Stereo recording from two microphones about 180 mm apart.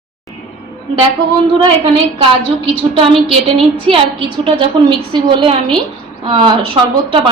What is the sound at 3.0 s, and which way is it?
A woman's voice, 30° right (ahead or behind).